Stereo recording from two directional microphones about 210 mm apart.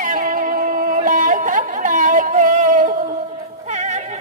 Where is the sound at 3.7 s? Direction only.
35° right (ahead or behind).